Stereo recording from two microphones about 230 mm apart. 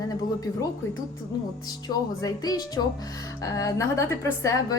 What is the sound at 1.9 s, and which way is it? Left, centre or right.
A woman's voice, centre.